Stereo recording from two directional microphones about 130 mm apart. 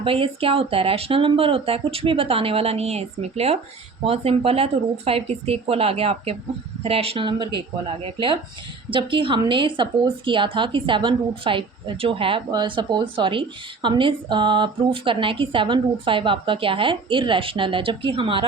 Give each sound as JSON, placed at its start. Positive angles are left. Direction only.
{"t": 0.0, "sound": "a woman's voice", "side_deg": -45}